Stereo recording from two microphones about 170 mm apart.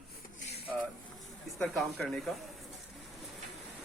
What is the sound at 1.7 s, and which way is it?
Speech, centre (ahead or behind).